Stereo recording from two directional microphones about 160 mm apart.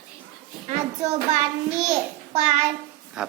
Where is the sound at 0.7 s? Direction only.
45° right (ahead or behind).